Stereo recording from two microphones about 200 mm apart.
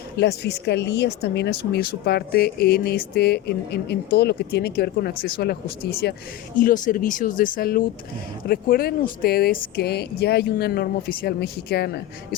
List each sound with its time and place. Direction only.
0.2 s speech: 55° left (ahead or behind)
6.6 s speech: 40° left (ahead or behind)